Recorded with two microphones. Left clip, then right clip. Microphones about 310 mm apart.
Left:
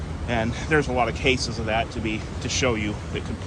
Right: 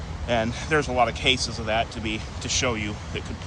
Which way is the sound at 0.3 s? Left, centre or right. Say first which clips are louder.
Even; centre.